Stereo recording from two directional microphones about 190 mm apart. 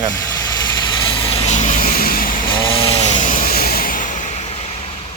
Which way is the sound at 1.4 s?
40° left (ahead or behind).